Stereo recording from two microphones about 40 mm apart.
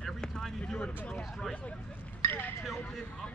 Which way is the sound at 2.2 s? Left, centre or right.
Left.